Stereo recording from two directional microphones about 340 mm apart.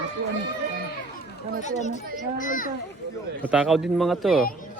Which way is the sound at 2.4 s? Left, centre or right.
Left.